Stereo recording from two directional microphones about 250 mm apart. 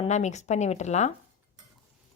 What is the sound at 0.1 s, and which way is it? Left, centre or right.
A woman's voice, left.